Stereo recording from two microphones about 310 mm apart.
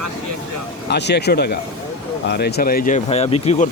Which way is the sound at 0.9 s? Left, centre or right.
Left.